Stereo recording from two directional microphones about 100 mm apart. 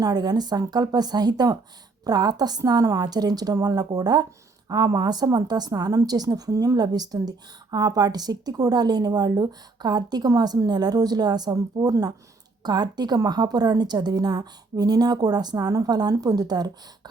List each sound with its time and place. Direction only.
0.0 s a woman's voice: 40° right (ahead or behind)